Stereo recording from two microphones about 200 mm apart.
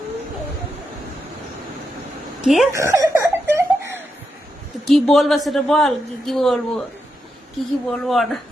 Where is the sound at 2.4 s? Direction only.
Centre (ahead or behind).